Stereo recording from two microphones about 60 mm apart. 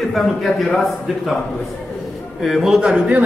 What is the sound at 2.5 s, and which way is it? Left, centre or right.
Speech, centre.